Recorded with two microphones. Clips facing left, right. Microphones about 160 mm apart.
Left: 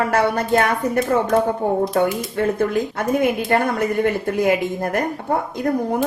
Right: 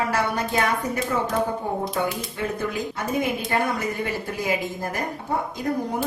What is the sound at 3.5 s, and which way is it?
A woman's voice, 55° left (ahead or behind).